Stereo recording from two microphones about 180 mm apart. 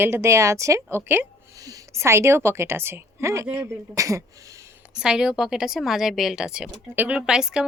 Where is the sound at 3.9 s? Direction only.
15° right (ahead or behind).